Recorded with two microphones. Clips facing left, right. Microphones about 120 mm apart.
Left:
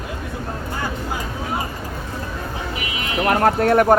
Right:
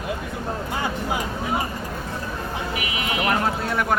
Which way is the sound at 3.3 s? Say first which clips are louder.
Left 9 dB; 55° left (ahead or behind).